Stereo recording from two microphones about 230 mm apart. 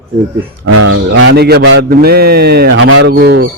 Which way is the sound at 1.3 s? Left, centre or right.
Right.